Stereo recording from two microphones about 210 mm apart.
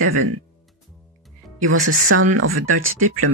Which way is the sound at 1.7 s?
75° right (ahead or behind).